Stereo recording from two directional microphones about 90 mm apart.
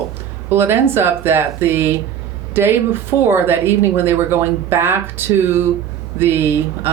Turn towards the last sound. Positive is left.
turn(degrees=-25)  # may be behind; listen again after turning